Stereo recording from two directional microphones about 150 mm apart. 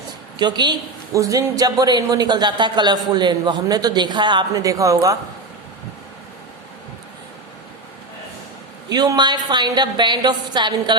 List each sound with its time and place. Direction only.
0.3 s a man's voice: 30° right (ahead or behind)
8.9 s a man's voice: 25° right (ahead or behind)